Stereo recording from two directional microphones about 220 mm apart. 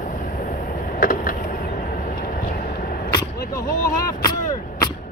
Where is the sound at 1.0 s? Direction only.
40° left (ahead or behind).